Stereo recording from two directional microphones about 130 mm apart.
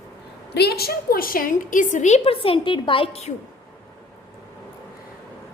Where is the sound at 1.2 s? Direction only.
90° left; by 3.3 s 50° left (ahead or behind).